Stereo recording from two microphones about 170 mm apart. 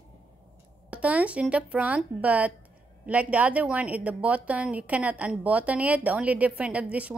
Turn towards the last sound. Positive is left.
turn(degrees=-5)  # may be behind; listen again after turning